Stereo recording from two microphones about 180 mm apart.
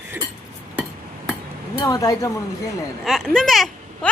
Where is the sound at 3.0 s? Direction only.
Centre (ahead or behind).